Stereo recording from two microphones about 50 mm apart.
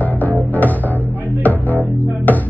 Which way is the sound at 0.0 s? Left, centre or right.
Left.